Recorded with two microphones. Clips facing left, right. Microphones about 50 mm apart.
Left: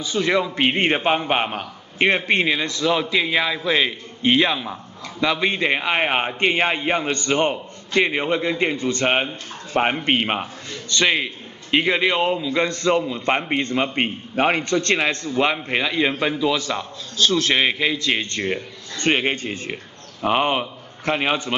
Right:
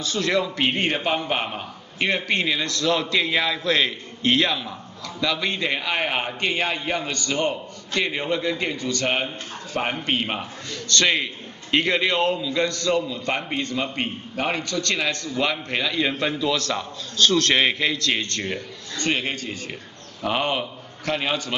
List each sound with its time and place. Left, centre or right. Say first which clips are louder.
0.0 s a man's voice: left 2 dB; centre; by 10.4 s left
10.9 s a man's voice: left 1 dB; centre
18.9 s a man's voice: left 5 dB; left